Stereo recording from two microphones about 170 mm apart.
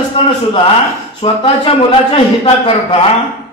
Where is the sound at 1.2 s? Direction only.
30° left (ahead or behind).